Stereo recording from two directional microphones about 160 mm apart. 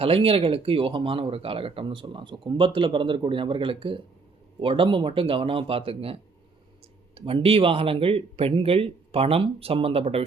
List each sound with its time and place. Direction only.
0.0 s speech: 35° right (ahead or behind)
7.2 s speech: 35° right (ahead or behind)